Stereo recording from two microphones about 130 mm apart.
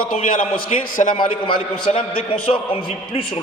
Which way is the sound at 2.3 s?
45° left (ahead or behind).